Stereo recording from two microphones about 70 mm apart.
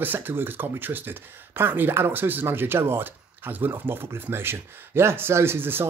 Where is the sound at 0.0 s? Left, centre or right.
Right.